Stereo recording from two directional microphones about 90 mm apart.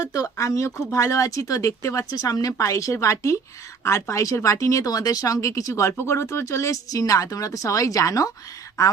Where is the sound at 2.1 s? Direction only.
45° left (ahead or behind).